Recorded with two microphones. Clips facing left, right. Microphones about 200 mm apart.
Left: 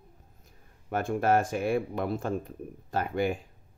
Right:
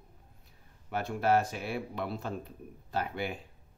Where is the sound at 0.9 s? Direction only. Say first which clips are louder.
Left 3 dB; 50° left (ahead or behind).